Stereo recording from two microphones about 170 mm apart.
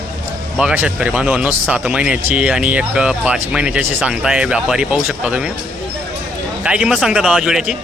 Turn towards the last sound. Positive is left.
turn(degrees=-5)  # may be behind; listen again after turning